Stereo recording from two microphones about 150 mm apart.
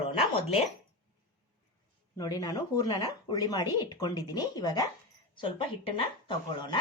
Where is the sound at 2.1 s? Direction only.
25° left (ahead or behind).